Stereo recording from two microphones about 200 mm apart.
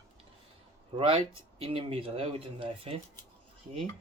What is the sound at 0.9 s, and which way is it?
Speech, 25° right (ahead or behind).